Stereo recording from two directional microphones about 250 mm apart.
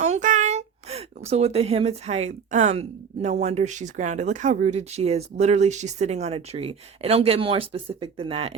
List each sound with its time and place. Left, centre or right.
0.0 s speech: right